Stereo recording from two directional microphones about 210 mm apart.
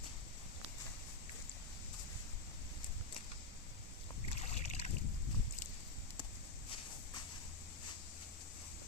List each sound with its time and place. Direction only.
4.3 s boat: 30° left (ahead or behind)